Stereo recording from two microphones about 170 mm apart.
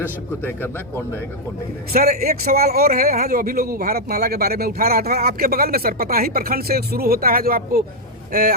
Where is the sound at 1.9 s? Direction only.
60° right (ahead or behind).